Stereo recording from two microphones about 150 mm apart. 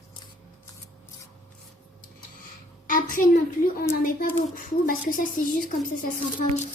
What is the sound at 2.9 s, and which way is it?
A woman's voice, 60° left (ahead or behind).